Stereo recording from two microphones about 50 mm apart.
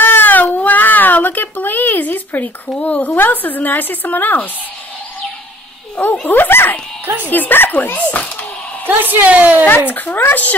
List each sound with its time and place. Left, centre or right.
0.0 s a sound: left
3.2 s a woman's voice: left
6.2 s a woman's voice: left
8.8 s a woman's voice: right
9.8 s a woman's voice: left